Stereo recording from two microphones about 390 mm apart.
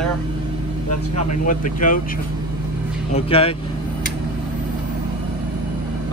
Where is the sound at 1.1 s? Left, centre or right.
Centre.